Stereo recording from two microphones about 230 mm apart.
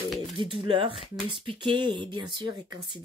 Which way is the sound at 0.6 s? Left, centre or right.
Right.